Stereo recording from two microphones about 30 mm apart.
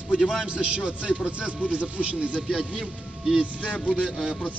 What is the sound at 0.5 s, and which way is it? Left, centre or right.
Speech, right.